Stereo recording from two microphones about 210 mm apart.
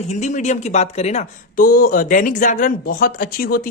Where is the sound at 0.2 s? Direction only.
35° left (ahead or behind).